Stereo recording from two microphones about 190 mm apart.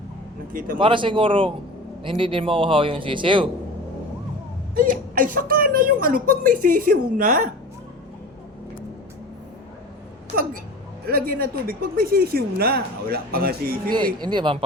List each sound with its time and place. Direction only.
0.8 s speech: 25° right (ahead or behind)
4.7 s speech: 45° right (ahead or behind)
11.1 s speech: 50° right (ahead or behind)
13.9 s speech: 25° right (ahead or behind)